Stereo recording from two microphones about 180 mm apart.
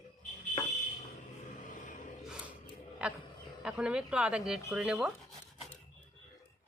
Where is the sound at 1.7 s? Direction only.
45° left (ahead or behind).